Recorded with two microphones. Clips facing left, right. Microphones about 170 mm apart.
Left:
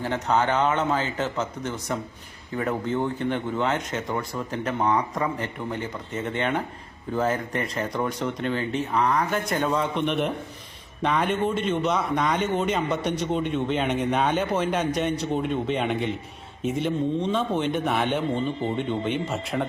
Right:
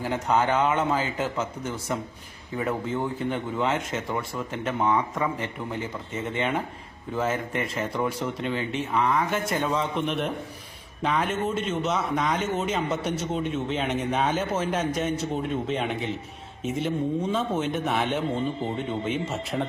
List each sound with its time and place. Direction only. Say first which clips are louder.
0.0 s a man's voice: even; 10° right (ahead or behind)
4.9 s speech: left 1 dB; 15° left (ahead or behind)
5.7 s a man's voice: left 1 dB; centre (ahead or behind)
7.3 s speech: left 1 dB; 35° left (ahead or behind)
7.8 s a man's voice: even; 5° right (ahead or behind)